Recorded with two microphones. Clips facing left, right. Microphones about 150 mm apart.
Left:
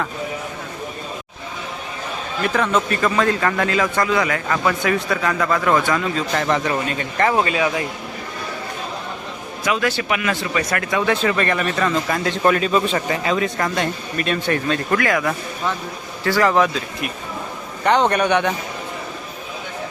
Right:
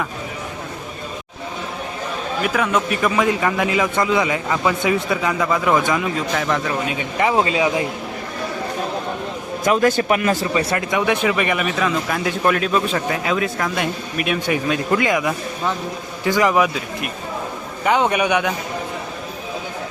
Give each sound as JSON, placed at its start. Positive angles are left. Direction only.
{"t": 2.4, "sound": "speech", "side_deg": -5}
{"t": 6.3, "sound": "speech", "side_deg": 0}
{"t": 7.3, "sound": "speech", "side_deg": -20}
{"t": 9.6, "sound": "a man's voice", "side_deg": -45}
{"t": 10.5, "sound": "speech", "side_deg": -25}
{"t": 10.9, "sound": "speech", "side_deg": -15}